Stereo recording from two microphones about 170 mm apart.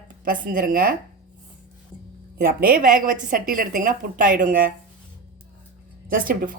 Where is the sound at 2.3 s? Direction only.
60° right (ahead or behind).